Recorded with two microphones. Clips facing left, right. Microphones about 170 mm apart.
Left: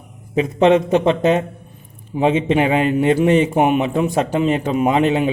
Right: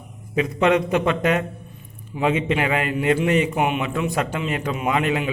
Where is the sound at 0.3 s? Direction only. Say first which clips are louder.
Left 5 dB; 30° left (ahead or behind).